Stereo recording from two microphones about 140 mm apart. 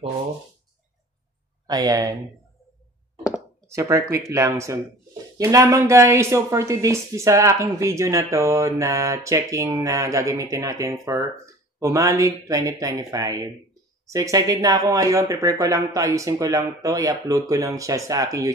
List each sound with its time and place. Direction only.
1.7 s a woman's voice: 25° right (ahead or behind)
3.6 s a woman's voice: 20° right (ahead or behind)